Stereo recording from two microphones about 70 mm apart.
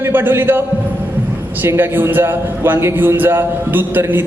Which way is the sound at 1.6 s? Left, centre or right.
Right.